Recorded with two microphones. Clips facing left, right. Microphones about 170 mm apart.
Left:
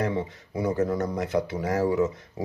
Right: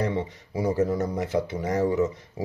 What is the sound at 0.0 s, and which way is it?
Speech, centre (ahead or behind).